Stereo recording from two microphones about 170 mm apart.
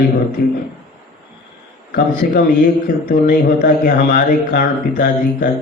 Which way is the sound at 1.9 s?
60° left (ahead or behind).